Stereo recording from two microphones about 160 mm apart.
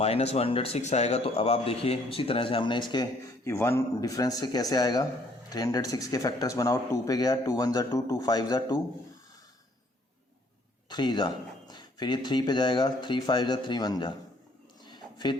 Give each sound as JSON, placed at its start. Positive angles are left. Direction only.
{"t": 0.0, "sound": "a man's voice", "side_deg": 40}
{"t": 2.9, "sound": "speech", "side_deg": 20}
{"t": 10.8, "sound": "a man's voice", "side_deg": 25}
{"t": 14.8, "sound": "a sound", "side_deg": 25}